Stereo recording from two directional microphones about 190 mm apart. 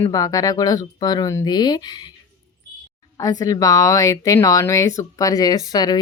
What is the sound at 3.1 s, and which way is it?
Speech, 20° left (ahead or behind).